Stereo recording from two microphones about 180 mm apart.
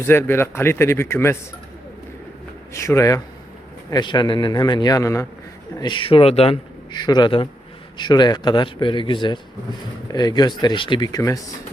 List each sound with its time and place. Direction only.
0.0 s speech: 10° left (ahead or behind)
2.7 s speech: 15° left (ahead or behind)